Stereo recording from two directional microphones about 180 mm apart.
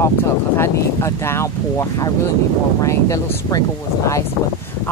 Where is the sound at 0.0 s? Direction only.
15° left (ahead or behind).